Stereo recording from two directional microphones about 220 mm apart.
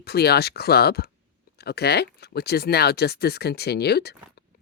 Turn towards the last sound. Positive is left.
turn(degrees=50)  # may be behind; listen again after turning